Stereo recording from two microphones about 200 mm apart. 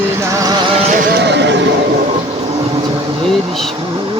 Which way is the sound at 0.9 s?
45° right (ahead or behind).